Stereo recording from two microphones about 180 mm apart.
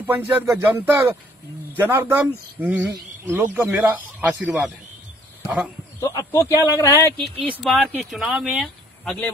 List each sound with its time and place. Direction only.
0.0 s speech: 10° right (ahead or behind)
5.9 s a man's voice: 15° left (ahead or behind)
7.4 s speech: 5° right (ahead or behind)